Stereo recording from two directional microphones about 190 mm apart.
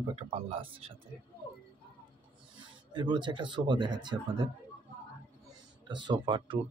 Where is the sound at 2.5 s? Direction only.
25° right (ahead or behind).